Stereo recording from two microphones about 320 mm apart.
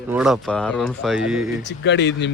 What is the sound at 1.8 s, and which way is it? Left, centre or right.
Speech, left.